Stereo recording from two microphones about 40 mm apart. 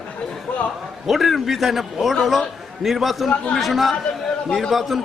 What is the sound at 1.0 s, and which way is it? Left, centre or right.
A man's voice, centre.